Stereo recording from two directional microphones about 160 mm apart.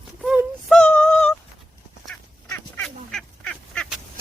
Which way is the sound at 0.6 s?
5° left (ahead or behind).